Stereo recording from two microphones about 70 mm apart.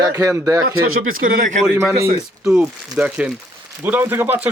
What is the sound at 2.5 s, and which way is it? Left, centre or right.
Speech, centre.